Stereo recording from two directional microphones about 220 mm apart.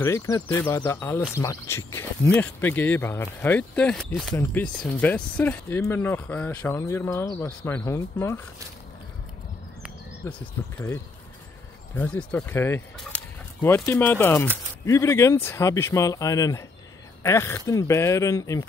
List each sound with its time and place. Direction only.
0.0 s speech: 15° left (ahead or behind)
11.9 s speech: 5° left (ahead or behind)